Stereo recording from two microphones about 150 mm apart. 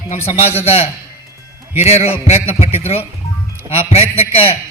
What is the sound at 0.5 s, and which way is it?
A man's voice, 45° left (ahead or behind).